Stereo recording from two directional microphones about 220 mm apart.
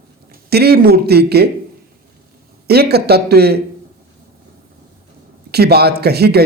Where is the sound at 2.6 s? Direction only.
45° right (ahead or behind).